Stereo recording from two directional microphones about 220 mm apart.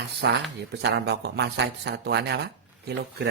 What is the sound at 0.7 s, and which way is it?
A man's voice, 50° right (ahead or behind).